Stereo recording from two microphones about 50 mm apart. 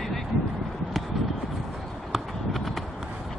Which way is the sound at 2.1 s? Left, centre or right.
Centre.